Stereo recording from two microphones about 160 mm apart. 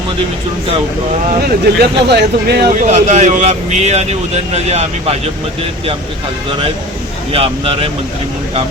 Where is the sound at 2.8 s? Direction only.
45° right (ahead or behind).